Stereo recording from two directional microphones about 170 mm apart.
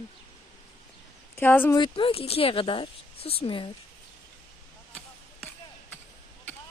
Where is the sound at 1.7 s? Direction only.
30° left (ahead or behind).